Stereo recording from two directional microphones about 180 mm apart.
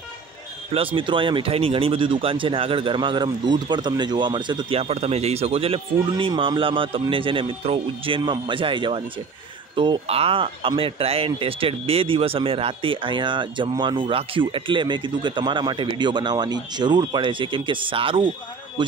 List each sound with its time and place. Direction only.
0.7 s speech: 30° right (ahead or behind)